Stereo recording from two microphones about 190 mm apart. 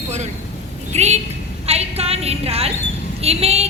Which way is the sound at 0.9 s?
35° right (ahead or behind).